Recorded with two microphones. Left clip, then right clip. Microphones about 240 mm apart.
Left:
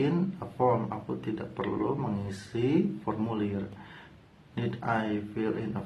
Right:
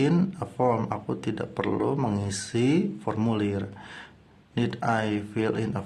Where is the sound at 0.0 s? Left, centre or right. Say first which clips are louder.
Right 4 dB; right.